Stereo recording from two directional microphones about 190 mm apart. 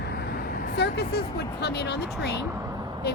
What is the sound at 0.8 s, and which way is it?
Speech, 60° left (ahead or behind).